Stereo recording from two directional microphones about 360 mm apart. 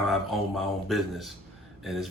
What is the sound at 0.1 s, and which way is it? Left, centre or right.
Speech, centre.